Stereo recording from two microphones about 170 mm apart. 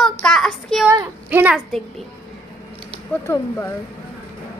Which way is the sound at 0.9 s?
15° right (ahead or behind).